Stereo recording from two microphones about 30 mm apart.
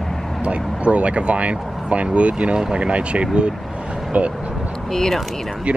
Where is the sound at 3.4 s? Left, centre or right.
Right.